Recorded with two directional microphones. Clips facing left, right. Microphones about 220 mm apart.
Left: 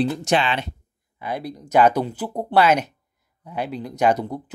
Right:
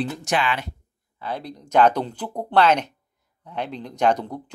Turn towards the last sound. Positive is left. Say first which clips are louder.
# left 1 dB
turn(degrees=10)  # may be behind; listen again after turning